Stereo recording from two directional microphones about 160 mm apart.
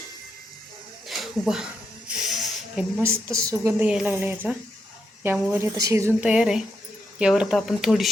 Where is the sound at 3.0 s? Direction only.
15° right (ahead or behind).